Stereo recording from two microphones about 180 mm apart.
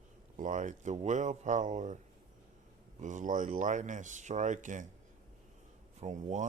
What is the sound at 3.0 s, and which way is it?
Speech, 45° right (ahead or behind).